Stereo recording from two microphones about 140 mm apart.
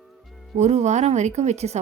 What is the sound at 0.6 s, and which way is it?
A woman's voice, 55° right (ahead or behind).